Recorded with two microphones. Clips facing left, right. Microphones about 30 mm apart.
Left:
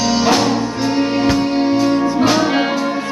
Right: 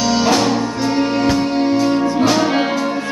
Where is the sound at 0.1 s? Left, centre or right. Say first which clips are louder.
Even; centre.